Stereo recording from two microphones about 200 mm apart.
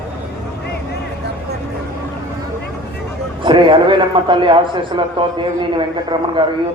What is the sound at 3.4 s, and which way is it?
A man's voice, 25° right (ahead or behind).